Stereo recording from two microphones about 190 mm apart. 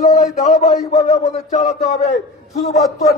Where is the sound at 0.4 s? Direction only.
35° left (ahead or behind).